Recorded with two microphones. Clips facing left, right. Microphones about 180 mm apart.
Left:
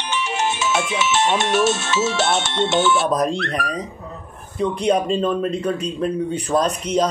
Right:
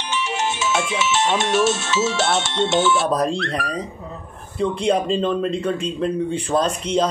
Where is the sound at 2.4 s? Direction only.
55° left (ahead or behind).